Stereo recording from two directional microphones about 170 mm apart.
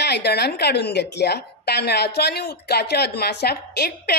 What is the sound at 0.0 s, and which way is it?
A woman's voice, 75° left (ahead or behind).